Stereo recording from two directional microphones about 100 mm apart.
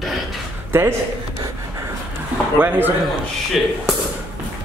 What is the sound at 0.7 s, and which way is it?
Speech, 25° right (ahead or behind).